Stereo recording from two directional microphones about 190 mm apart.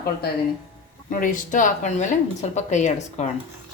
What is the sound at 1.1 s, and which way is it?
Speech, 45° left (ahead or behind).